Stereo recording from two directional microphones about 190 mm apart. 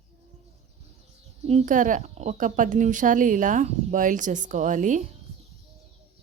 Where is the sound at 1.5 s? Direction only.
40° right (ahead or behind).